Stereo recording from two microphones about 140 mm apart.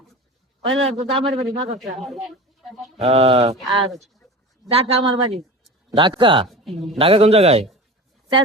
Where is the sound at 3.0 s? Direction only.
45° right (ahead or behind).